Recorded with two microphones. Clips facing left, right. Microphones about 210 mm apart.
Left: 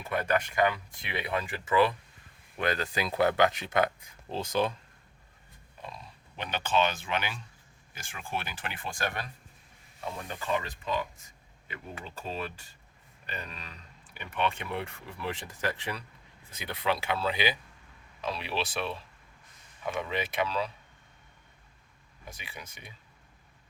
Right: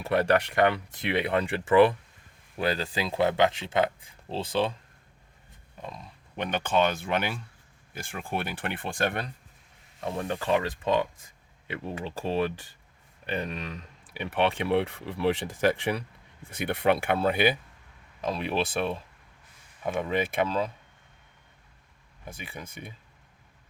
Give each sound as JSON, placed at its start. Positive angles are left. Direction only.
{"t": 0.0, "sound": "speech", "side_deg": -70}
{"t": 2.6, "sound": "speech", "side_deg": -30}
{"t": 5.8, "sound": "speech", "side_deg": -50}
{"t": 12.0, "sound": "speech", "side_deg": -70}
{"t": 14.1, "sound": "speech", "side_deg": -70}
{"t": 20.0, "sound": "speech", "side_deg": -50}
{"t": 22.4, "sound": "speech", "side_deg": -50}